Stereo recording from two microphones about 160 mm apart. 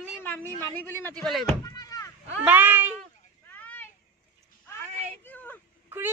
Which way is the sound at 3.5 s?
10° left (ahead or behind).